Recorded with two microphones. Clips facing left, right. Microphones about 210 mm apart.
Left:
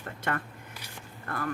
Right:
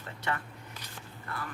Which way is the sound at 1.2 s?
50° left (ahead or behind).